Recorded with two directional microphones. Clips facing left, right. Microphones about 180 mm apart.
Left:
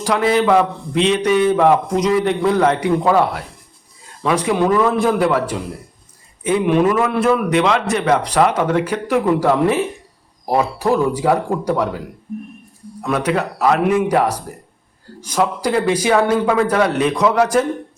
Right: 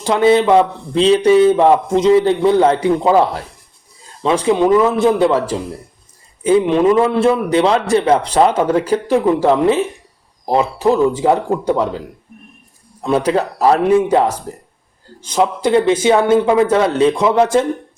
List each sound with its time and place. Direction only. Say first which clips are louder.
0.0 s speech: right 4 dB; 25° right (ahead or behind)